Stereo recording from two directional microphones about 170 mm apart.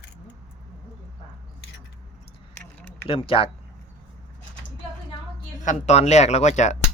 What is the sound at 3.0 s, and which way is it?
Speech, 30° left (ahead or behind).